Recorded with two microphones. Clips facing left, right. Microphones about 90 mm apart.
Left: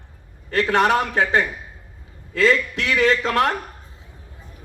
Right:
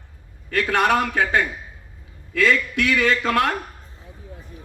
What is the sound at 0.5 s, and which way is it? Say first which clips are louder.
A man's voice: left 1 dB; 30° left (ahead or behind).